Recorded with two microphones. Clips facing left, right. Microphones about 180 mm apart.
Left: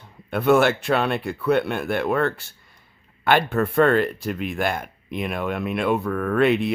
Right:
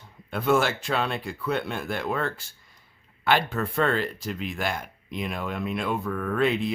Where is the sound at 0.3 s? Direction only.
65° left (ahead or behind).